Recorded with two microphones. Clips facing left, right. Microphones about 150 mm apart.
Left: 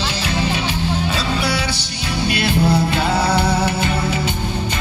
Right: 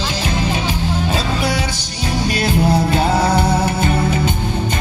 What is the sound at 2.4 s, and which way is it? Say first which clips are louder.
Music: right 1 dB; 45° right (ahead or behind).